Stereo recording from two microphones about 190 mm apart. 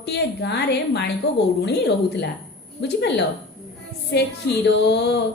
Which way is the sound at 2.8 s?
65° left (ahead or behind).